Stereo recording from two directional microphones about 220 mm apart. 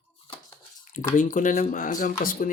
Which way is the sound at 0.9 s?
35° left (ahead or behind).